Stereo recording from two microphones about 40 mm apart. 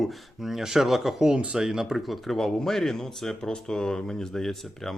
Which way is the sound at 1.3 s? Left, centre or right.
Right.